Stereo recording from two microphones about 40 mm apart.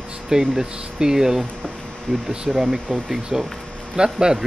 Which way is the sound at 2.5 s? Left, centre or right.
Right.